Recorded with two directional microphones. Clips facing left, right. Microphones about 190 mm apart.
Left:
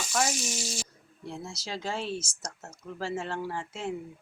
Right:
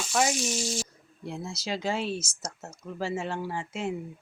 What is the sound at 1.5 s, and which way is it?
Speech, 15° right (ahead or behind).